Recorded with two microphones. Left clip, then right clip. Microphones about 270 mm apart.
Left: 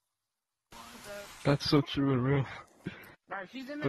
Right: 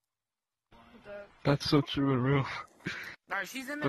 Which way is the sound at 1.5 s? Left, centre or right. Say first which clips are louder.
Even; centre.